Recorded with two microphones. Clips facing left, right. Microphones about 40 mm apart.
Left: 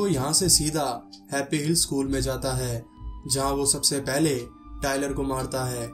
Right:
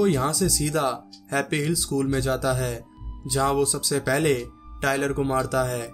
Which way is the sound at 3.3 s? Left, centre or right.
Right.